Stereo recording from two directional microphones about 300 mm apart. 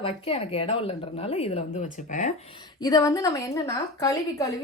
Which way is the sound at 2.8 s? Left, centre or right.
Centre.